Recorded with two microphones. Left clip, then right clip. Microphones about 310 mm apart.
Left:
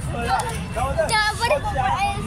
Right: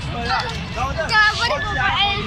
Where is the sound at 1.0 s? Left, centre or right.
Left.